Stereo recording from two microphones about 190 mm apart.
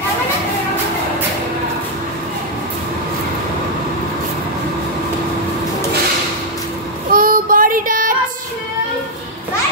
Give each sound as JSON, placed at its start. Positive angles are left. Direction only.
{"t": 7.1, "sound": "child singing", "side_deg": -50}